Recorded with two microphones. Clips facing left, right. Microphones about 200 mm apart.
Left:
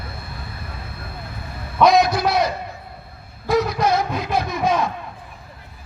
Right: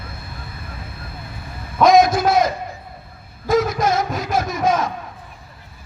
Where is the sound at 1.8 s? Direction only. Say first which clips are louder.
Right 3 dB; 45° right (ahead or behind).